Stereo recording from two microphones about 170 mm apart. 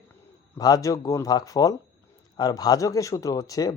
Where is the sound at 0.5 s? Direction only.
20° left (ahead or behind).